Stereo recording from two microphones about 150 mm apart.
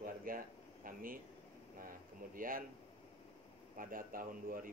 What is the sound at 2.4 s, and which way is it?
Speech, 70° right (ahead or behind).